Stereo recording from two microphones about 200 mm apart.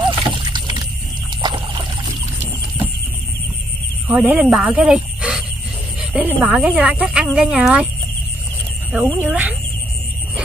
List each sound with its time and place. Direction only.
0.5 s rowboat: 20° right (ahead or behind)
1.4 s a sound: 20° right (ahead or behind)
4.1 s speech: 5° right (ahead or behind)
5.9 s a sound: 5° right (ahead or behind)
6.4 s speech: 5° right (ahead or behind)
8.9 s speech: 5° right (ahead or behind)